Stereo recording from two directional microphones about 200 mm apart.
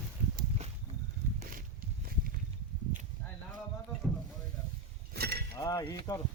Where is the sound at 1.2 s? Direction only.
10° right (ahead or behind).